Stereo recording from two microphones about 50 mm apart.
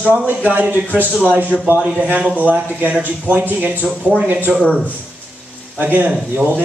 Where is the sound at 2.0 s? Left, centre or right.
Right.